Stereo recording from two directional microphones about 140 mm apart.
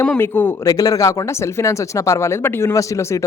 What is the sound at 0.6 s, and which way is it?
Speech, 25° left (ahead or behind).